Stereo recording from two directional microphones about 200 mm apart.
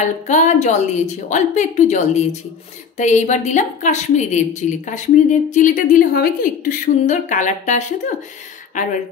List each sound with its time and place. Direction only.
0.0 s a woman's voice: 35° left (ahead or behind)